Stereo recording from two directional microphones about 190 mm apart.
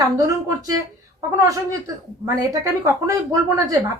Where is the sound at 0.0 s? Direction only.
20° right (ahead or behind).